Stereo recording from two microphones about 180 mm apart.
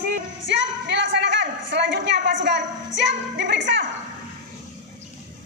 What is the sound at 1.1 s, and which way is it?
A woman's voice, 90° right.